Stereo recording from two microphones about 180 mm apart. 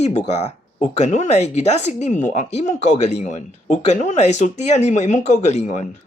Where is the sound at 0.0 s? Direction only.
40° left (ahead or behind).